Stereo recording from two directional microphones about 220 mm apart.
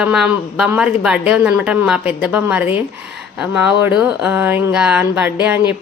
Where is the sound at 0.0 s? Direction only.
5° right (ahead or behind).